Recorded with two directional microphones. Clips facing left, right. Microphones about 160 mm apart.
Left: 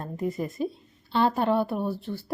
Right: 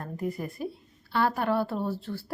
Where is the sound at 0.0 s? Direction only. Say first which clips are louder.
Left 3 dB; 25° left (ahead or behind).